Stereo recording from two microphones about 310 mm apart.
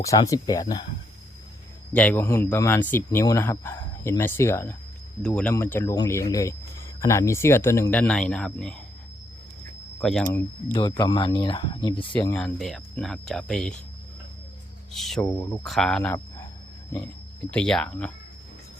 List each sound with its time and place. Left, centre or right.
0.0 s speech: centre
1.9 s speech: centre
10.0 s speech: centre
10.7 s speech: centre
14.9 s speech: centre
17.5 s speech: centre